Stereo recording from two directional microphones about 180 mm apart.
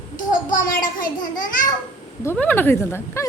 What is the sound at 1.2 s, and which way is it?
Speech, 50° left (ahead or behind).